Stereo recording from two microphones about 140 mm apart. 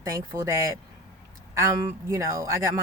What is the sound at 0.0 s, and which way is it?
Speech, 20° right (ahead or behind).